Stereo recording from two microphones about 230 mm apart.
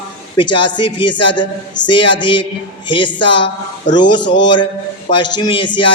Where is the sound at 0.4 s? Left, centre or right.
Left.